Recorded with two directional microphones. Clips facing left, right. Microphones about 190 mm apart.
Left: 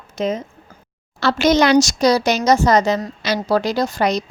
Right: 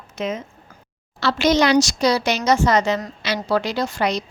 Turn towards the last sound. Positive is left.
turn(degrees=40)  # may be behind; listen again after turning